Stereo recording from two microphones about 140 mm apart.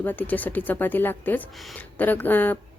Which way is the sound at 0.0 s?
10° left (ahead or behind).